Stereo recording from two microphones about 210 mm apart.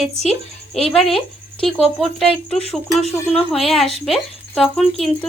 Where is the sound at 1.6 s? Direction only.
5° left (ahead or behind).